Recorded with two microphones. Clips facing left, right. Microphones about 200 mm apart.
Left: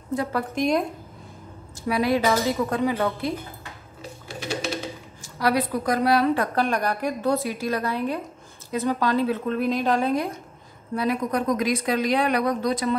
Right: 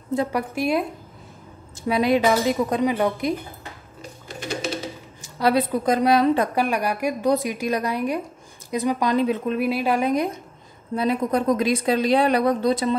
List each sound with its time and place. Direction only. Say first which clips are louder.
0.1 s a woman's voice: right 2 dB; 20° right (ahead or behind)
1.9 s a woman's voice: right 3 dB; 20° right (ahead or behind)
5.2 s a woman's voice: right 3 dB; 25° right (ahead or behind)
11.0 s a woman's voice: right 3 dB; 25° right (ahead or behind)